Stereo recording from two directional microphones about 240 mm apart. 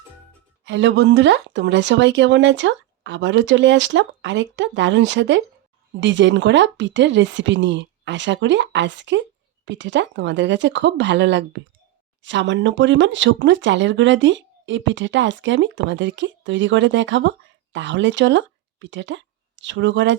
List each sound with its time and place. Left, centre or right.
0.6 s speech: right